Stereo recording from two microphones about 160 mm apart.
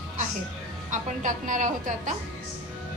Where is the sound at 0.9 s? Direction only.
50° right (ahead or behind).